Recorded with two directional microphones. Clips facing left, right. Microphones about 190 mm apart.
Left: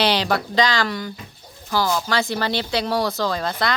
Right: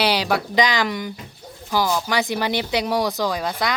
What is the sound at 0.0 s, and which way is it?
Speech, 10° right (ahead or behind).